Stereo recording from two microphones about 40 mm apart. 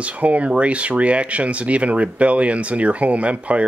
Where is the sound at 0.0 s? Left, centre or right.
Right.